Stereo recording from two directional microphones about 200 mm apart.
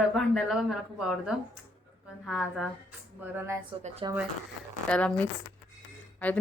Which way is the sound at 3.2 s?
10° right (ahead or behind).